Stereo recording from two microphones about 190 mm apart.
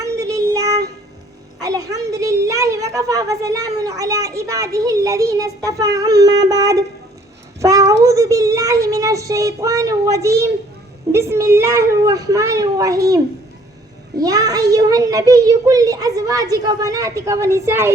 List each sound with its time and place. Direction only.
0.0 s child singing: 15° right (ahead or behind)
1.5 s a woman's voice: 20° right (ahead or behind)
7.6 s a sound: 15° right (ahead or behind)
8.0 s a child's voice: 15° right (ahead or behind)